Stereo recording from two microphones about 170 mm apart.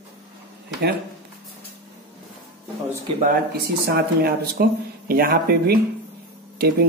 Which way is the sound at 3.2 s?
65° right (ahead or behind).